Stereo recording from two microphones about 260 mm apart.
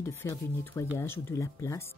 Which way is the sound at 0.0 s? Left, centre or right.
Centre.